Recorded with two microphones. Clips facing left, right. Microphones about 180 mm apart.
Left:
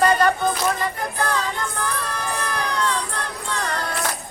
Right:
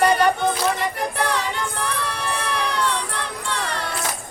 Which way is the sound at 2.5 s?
70° right (ahead or behind).